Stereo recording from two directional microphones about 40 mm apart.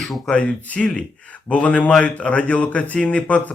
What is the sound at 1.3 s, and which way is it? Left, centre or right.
Speech, left.